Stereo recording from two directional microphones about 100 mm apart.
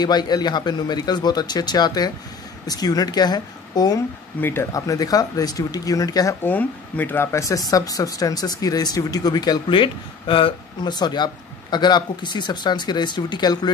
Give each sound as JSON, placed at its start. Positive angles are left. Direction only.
{"t": 0.0, "sound": "speech", "side_deg": 45}
{"t": 4.4, "sound": "speech", "side_deg": 20}
{"t": 4.7, "sound": "speech", "side_deg": 35}
{"t": 6.4, "sound": "speech", "side_deg": 15}